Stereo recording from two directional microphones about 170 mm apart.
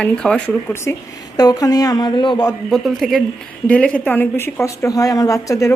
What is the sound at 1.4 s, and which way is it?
Speech, 20° left (ahead or behind).